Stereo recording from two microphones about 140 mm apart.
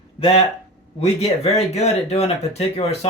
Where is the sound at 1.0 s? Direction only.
50° left (ahead or behind).